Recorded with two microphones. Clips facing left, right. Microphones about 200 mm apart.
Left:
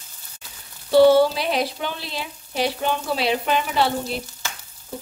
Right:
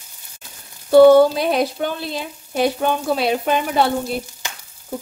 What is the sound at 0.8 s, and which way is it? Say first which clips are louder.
Speech: right 5 dB; 50° right (ahead or behind).